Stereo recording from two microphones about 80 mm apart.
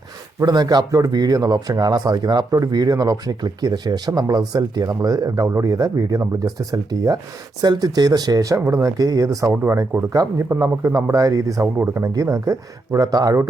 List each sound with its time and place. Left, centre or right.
0.3 s speech: right
2.5 s speech: right
11.6 s speech: right
12.0 s speech: right